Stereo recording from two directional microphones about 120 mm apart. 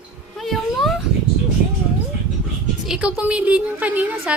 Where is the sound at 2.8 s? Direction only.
5° right (ahead or behind).